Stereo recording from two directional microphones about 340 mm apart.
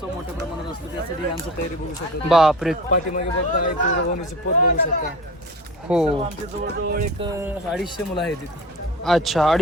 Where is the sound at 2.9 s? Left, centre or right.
Left.